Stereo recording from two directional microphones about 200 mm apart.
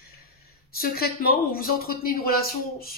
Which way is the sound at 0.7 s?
50° left (ahead or behind).